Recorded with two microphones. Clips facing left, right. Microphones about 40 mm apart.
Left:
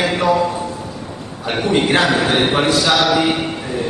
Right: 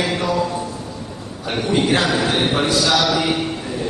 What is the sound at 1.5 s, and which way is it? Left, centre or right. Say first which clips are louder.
A man's voice: left 2 dB; left.